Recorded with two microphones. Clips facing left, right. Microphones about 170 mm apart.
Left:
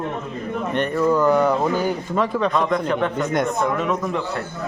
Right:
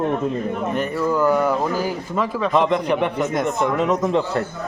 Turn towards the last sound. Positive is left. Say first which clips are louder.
# right 4 dB
turn(degrees=-25)  # may be behind; listen again after turning